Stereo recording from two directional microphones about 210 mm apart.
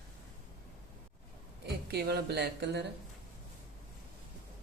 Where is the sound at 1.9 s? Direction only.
50° right (ahead or behind).